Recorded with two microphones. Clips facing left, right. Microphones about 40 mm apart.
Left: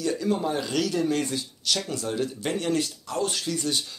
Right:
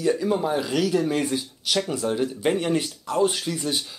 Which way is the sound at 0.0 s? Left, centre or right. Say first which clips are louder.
Right 3 dB; centre.